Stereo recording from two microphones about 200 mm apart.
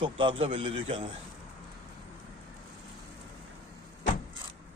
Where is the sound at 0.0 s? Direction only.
25° right (ahead or behind).